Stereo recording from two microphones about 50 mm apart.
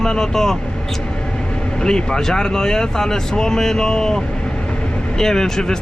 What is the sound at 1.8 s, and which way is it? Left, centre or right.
Speech, centre.